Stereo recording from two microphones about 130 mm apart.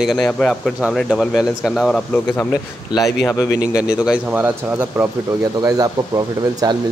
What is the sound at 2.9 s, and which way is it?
Speech, 25° left (ahead or behind).